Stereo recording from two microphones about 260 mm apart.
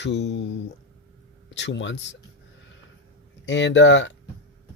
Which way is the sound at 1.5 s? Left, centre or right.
Left.